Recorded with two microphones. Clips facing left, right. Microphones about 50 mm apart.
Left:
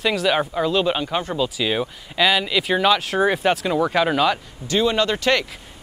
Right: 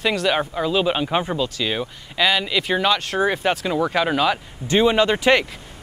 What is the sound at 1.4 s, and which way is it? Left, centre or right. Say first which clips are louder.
Speech: left 2 dB; centre.